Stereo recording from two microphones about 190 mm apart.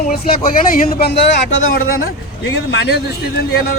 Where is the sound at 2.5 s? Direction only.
65° left (ahead or behind).